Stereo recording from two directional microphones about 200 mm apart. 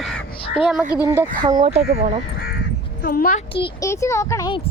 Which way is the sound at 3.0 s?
50° left (ahead or behind).